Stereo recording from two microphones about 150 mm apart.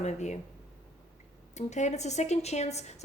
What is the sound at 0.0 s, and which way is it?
Speech, 50° left (ahead or behind).